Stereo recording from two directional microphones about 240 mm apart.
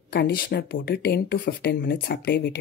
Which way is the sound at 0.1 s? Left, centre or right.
Left.